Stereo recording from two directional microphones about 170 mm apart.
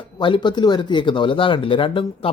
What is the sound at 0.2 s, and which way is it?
Speech, 30° left (ahead or behind).